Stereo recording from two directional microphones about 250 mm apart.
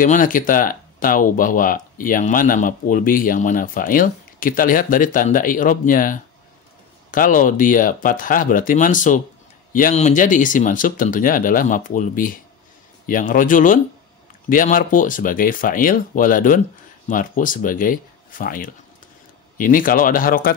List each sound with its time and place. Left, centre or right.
0.0 s speech: left